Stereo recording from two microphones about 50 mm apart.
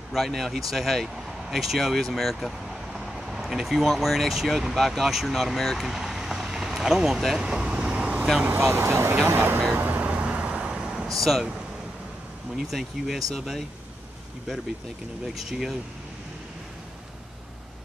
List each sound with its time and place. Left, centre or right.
0.3 s speech: centre
5.8 s vehicle: centre
8.7 s speech: right
9.1 s speech: right
9.8 s vehicle: right; by 11.1 s centre
11.1 s speech: centre
12.7 s speech: centre
15.3 s speech: centre